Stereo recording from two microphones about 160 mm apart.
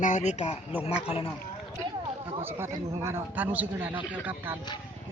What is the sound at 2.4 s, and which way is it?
A man's voice, 15° right (ahead or behind).